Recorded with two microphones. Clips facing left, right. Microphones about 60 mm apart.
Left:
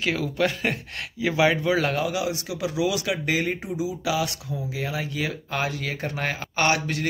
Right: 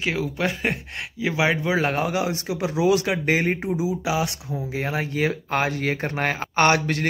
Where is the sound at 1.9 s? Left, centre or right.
Right.